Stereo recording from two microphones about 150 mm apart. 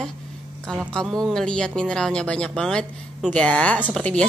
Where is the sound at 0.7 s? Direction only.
5° left (ahead or behind).